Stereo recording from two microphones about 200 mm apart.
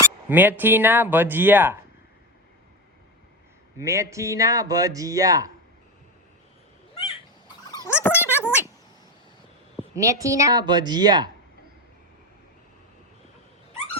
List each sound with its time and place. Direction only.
0.0 s speech: 10° right (ahead or behind)
3.8 s speech: 15° right (ahead or behind)
7.7 s gargling: 15° left (ahead or behind)
9.9 s a woman's voice: 15° right (ahead or behind)